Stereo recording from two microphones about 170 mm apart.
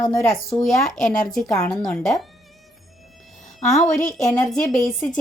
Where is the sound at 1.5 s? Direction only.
20° left (ahead or behind).